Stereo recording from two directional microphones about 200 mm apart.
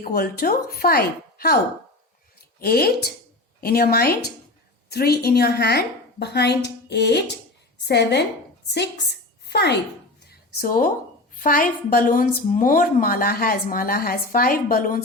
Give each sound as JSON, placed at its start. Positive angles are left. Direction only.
{"t": 0.0, "sound": "a woman's voice", "side_deg": 50}
{"t": 2.6, "sound": "a woman's voice", "side_deg": 50}
{"t": 10.2, "sound": "a sound", "side_deg": 45}
{"t": 11.3, "sound": "a woman's voice", "side_deg": 45}